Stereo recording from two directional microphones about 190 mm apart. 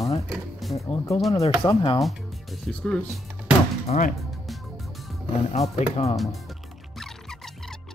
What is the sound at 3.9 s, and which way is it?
Speech, 40° left (ahead or behind).